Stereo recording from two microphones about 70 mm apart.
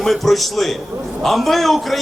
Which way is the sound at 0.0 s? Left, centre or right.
Centre.